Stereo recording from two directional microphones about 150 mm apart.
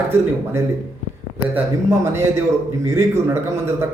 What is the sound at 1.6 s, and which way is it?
A man's voice, 15° right (ahead or behind).